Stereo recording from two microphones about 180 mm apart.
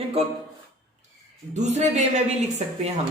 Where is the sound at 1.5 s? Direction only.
40° right (ahead or behind).